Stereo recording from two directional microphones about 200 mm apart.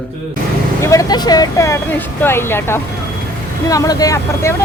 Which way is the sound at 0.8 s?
15° left (ahead or behind).